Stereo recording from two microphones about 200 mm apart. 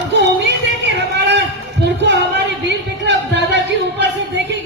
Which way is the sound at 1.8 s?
60° right (ahead or behind).